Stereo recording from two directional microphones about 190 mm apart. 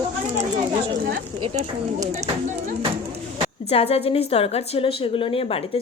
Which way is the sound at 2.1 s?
35° right (ahead or behind).